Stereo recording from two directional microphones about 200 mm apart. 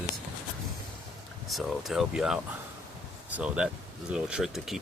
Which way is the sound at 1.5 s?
Centre (ahead or behind).